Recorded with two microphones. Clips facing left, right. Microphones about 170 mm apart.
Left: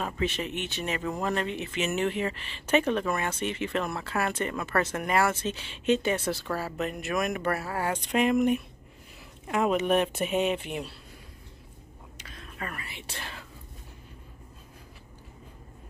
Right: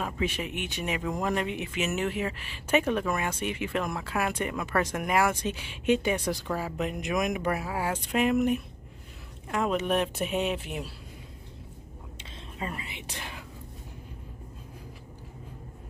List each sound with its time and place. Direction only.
0.0 s speech: 10° right (ahead or behind)
12.2 s whispering: 25° right (ahead or behind)